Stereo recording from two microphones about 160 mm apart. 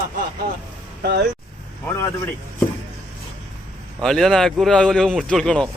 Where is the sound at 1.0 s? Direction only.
90° right.